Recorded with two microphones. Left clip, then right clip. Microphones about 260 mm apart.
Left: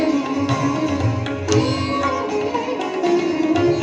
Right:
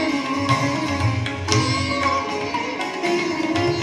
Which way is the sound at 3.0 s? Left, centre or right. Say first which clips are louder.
Left 4 dB; right.